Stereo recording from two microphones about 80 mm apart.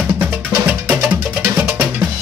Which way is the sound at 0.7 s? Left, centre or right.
Centre.